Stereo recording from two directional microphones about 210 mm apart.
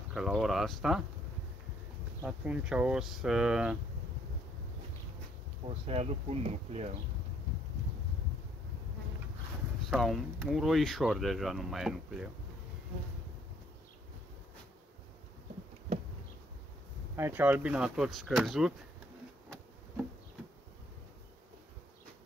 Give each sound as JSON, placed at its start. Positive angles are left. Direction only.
{"t": 0.1, "sound": "speech", "side_deg": 0}
{"t": 2.2, "sound": "speech", "side_deg": -5}
{"t": 5.7, "sound": "speech", "side_deg": -30}
{"t": 9.8, "sound": "speech", "side_deg": 0}
{"t": 17.1, "sound": "speech", "side_deg": -10}